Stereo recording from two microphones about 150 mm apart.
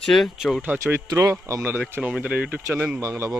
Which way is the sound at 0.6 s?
10° right (ahead or behind).